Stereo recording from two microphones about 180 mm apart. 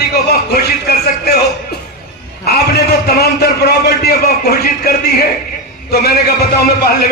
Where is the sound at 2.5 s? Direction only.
60° left (ahead or behind).